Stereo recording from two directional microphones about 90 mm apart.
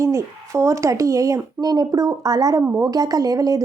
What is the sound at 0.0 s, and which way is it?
A woman's voice, 35° right (ahead or behind).